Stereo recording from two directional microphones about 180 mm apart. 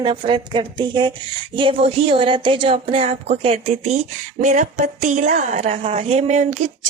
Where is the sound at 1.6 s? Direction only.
30° right (ahead or behind).